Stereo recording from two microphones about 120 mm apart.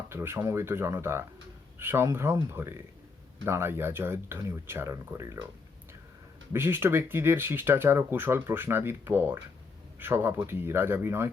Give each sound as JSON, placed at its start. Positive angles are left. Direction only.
{"t": 0.1, "sound": "speech", "side_deg": -20}
{"t": 6.5, "sound": "speech", "side_deg": -20}